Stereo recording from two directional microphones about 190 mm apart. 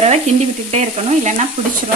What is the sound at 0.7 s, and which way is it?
Frying, 35° right (ahead or behind).